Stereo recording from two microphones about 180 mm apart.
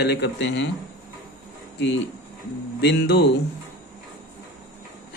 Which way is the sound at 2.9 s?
70° left (ahead or behind).